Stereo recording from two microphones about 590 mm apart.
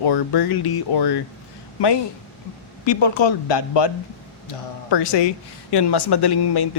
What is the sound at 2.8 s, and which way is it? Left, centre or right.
Speech, left.